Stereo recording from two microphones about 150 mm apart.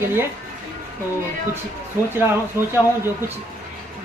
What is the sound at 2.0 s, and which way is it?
A woman's voice, 15° right (ahead or behind).